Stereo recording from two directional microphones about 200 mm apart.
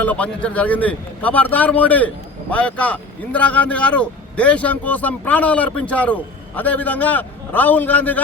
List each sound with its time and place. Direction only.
0.0 s speech: 5° left (ahead or behind)